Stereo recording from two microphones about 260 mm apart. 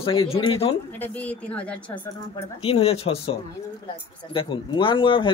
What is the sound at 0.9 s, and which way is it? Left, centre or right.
Speech, centre.